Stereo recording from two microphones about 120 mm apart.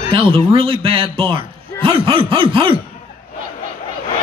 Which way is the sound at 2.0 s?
45° right (ahead or behind).